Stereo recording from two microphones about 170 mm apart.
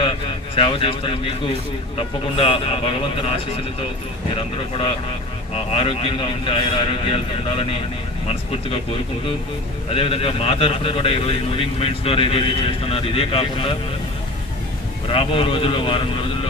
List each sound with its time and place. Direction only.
0.0 s a sound: 30° left (ahead or behind)
2.0 s a man's voice: 30° left (ahead or behind)
9.9 s a man's voice: 35° left (ahead or behind)
15.0 s a man's voice: 30° left (ahead or behind)